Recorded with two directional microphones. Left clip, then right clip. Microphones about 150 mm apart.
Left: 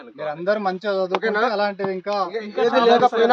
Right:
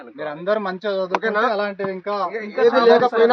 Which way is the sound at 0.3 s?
40° left (ahead or behind).